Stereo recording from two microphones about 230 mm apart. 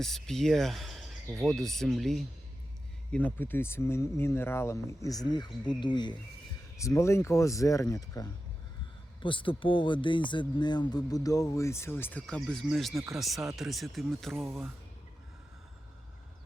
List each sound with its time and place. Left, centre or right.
0.0 s speech: centre